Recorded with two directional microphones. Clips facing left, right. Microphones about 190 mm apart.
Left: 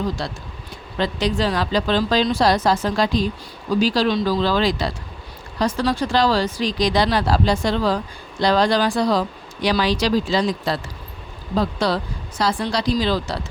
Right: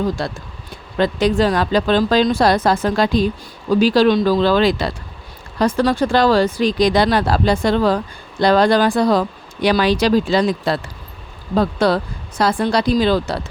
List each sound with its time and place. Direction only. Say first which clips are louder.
0.2 s speech: right 4 dB; 55° right (ahead or behind)